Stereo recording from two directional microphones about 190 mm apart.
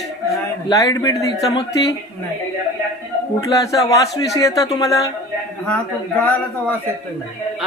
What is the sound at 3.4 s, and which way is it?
Speech, 15° left (ahead or behind).